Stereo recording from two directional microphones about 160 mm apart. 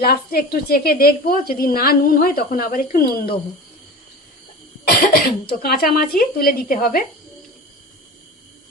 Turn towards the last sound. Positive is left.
turn(degrees=65)  # may be behind; listen again after turning